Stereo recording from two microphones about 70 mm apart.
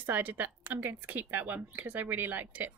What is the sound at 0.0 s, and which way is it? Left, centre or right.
A woman's voice, right.